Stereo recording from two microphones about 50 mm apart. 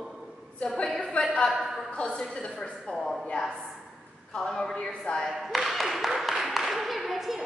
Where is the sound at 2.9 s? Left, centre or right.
Centre.